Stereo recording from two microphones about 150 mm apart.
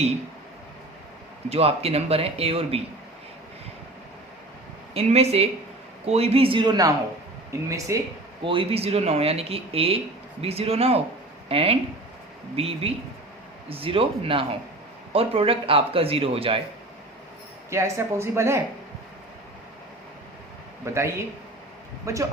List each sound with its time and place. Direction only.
1.5 s speech: 40° right (ahead or behind)
4.9 s a woman's voice: 45° right (ahead or behind); by 8.0 s 20° right (ahead or behind)
8.4 s speech: 40° right (ahead or behind)
17.7 s a woman's voice: 20° right (ahead or behind)
20.8 s a man's voice: 20° right (ahead or behind)